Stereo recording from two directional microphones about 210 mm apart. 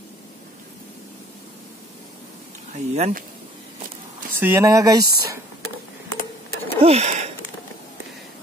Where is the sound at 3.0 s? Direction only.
40° right (ahead or behind).